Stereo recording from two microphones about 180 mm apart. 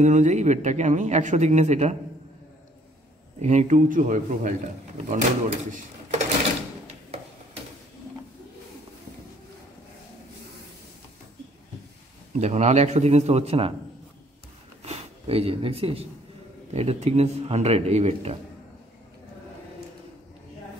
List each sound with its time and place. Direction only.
0.0 s speech: 40° right (ahead or behind)
3.3 s a man's voice: 40° right (ahead or behind)
12.4 s speech: 40° right (ahead or behind)
14.8 s speech: 35° right (ahead or behind)